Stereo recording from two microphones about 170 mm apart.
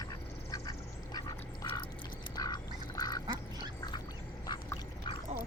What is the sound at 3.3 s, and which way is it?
Duck, 25° right (ahead or behind).